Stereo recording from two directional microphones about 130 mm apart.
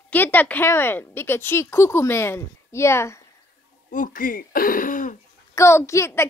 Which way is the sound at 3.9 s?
90° left.